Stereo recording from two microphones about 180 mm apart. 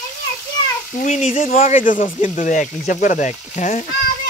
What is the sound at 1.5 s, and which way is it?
Speech, 50° left (ahead or behind).